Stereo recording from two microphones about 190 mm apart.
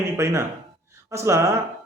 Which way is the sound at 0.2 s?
15° right (ahead or behind).